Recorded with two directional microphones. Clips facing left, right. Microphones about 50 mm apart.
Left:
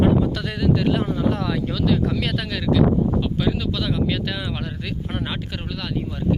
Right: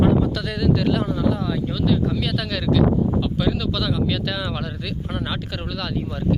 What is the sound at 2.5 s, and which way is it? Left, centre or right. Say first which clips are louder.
Speech: even; centre.